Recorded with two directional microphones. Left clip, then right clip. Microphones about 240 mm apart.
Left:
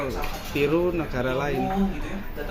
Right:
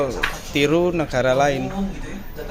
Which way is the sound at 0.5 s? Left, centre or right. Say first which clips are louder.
Right 4 dB; right.